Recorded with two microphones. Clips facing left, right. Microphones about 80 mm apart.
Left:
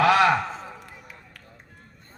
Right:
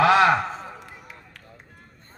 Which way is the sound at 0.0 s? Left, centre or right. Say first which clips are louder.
Right 1 dB; right.